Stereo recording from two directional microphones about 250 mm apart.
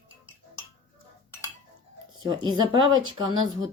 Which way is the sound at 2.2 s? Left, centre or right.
Centre.